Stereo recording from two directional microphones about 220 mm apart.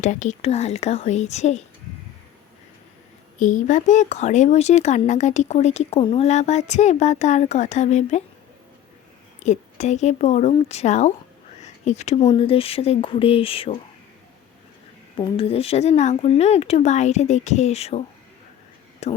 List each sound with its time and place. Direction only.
0.0 s speech: 35° left (ahead or behind)
3.3 s speech: 35° left (ahead or behind)
9.4 s speech: 30° left (ahead or behind)
15.2 s speech: 25° left (ahead or behind)
19.0 s speech: 30° left (ahead or behind)